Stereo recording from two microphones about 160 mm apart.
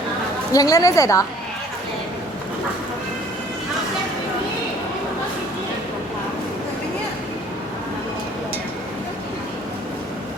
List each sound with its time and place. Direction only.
0.5 s a woman's voice: 20° left (ahead or behind)